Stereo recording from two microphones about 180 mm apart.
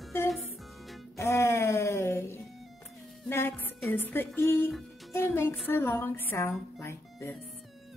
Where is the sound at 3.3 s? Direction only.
10° left (ahead or behind).